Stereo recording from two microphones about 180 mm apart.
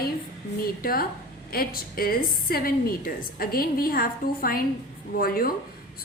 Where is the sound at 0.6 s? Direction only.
55° left (ahead or behind).